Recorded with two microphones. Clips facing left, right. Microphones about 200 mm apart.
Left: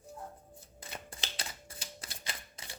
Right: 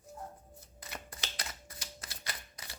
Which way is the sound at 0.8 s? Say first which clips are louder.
Left 1 dB; 30° left (ahead or behind).